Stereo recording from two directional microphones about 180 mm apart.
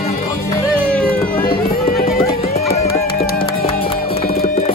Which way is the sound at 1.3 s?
55° left (ahead or behind).